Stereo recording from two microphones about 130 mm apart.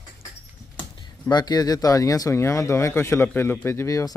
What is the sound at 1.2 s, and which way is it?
Speech, 30° left (ahead or behind).